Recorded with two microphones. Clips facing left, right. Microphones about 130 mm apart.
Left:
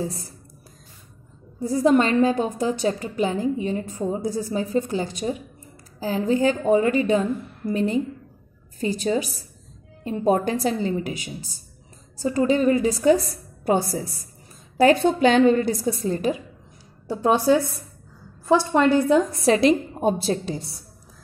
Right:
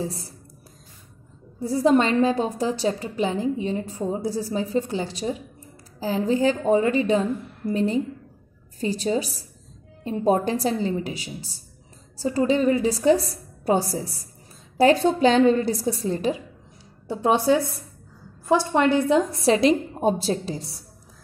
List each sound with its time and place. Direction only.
1.6 s a woman's voice: 30° right (ahead or behind)
14.8 s a woman's voice: 30° right (ahead or behind)